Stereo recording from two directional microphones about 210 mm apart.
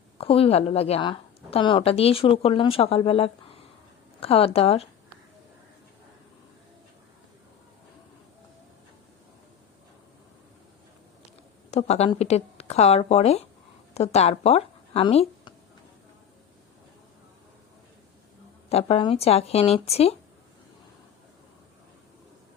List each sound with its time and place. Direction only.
0.2 s a woman's voice: 25° left (ahead or behind)
11.7 s speech: 30° left (ahead or behind)
18.7 s a woman's voice: 30° left (ahead or behind)